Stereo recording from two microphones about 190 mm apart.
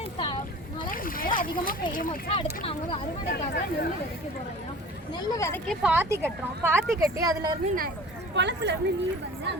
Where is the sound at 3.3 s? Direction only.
60° left (ahead or behind).